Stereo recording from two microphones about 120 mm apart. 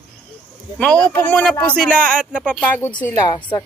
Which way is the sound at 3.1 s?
35° left (ahead or behind).